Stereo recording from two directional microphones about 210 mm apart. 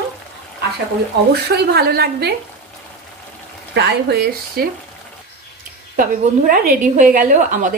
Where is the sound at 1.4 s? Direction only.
50° right (ahead or behind).